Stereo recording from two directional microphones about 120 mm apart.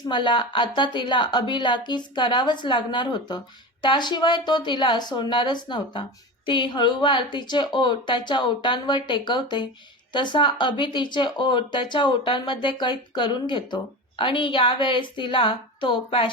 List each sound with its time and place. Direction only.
0.1 s speech: 40° left (ahead or behind)